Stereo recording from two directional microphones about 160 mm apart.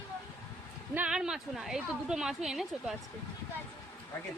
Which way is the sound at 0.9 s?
5° right (ahead or behind).